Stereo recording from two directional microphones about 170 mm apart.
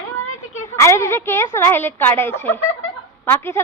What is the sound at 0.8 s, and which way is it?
Speech, 15° left (ahead or behind).